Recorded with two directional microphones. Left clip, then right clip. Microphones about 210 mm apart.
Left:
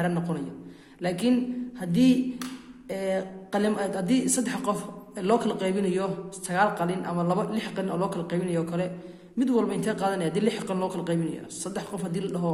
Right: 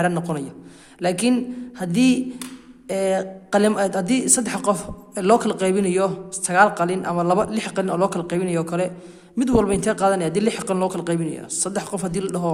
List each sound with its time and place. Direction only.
0.0 s a woman's voice: 40° right (ahead or behind)